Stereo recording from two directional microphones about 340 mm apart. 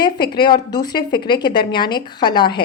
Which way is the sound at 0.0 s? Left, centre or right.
Centre.